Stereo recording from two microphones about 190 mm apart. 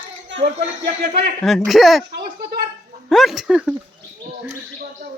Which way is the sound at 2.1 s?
55° right (ahead or behind).